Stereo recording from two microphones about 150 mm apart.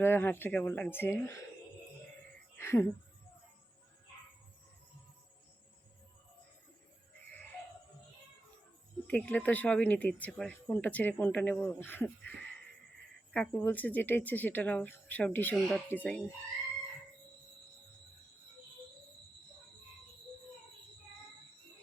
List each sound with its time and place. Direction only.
0.0 s speech: 15° left (ahead or behind)
2.6 s speech: 15° left (ahead or behind)
9.0 s speech: 10° left (ahead or behind)